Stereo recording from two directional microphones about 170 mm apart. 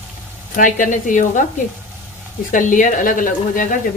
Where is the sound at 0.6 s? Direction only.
50° left (ahead or behind).